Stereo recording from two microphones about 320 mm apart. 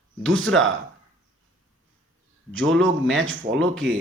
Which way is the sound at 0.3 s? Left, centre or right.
Right.